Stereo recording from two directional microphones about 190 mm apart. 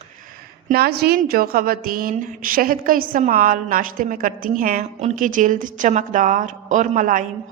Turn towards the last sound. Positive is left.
turn(degrees=-45)  # may be behind; listen again after turning